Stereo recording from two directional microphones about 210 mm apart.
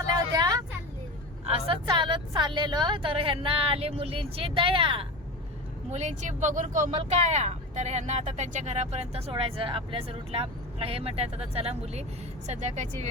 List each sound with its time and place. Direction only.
0.3 s vehicle: 20° right (ahead or behind)
1.5 s speech: 25° right (ahead or behind)